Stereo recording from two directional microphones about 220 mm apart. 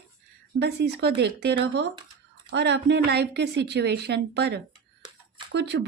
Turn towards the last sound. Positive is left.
turn(degrees=-50)  # may be behind; listen again after turning